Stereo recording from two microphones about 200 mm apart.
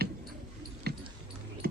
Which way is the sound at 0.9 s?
55° right (ahead or behind).